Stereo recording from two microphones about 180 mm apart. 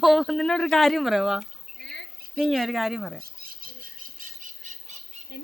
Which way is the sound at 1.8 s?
75° left (ahead or behind).